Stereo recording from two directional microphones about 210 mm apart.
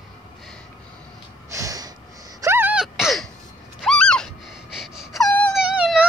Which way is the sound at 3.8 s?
5° left (ahead or behind).